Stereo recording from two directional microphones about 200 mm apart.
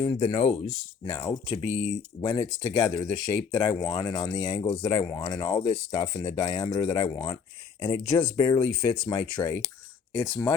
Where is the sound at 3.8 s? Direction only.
20° left (ahead or behind).